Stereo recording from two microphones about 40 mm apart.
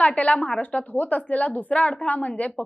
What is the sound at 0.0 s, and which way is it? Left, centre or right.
A woman's voice, left.